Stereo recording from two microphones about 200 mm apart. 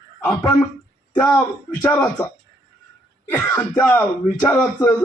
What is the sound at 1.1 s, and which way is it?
A man's voice, 10° left (ahead or behind).